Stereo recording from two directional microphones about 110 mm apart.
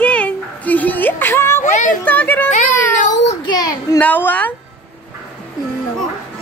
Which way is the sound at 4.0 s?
15° left (ahead or behind).